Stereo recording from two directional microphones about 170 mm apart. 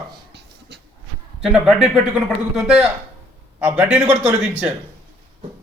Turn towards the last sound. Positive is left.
turn(degrees=-5)  # may be behind; listen again after turning